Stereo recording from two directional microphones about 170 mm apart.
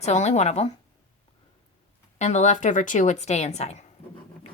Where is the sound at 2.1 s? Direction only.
45° left (ahead or behind).